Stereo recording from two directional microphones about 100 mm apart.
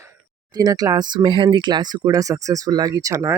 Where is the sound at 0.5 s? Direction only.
40° right (ahead or behind).